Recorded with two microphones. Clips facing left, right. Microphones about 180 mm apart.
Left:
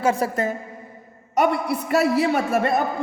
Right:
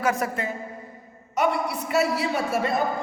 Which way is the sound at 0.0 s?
30° left (ahead or behind).